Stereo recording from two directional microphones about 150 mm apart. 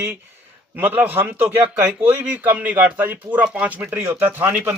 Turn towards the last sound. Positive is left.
turn(degrees=-15)  # may be behind; listen again after turning